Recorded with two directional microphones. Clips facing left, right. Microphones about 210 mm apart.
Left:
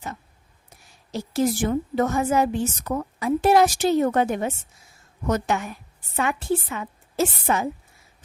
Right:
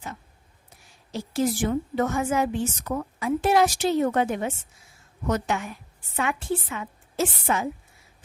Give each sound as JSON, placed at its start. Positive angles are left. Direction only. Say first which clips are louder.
{"t": 1.1, "sound": "a woman's voice", "louder": "left 2 dB", "side_deg": 40}